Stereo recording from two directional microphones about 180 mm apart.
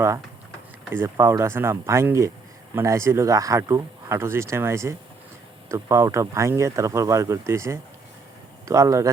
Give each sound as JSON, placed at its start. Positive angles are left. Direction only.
{"t": 0.9, "sound": "speech", "side_deg": -15}